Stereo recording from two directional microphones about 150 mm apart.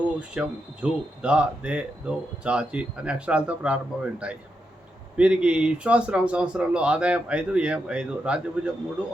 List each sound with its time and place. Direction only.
0.2 s speech: 5° right (ahead or behind)